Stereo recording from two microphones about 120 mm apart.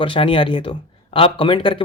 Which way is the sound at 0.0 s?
45° left (ahead or behind).